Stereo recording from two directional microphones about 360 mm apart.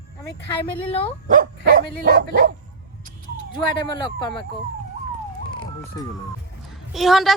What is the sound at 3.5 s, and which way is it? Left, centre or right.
Speech, centre.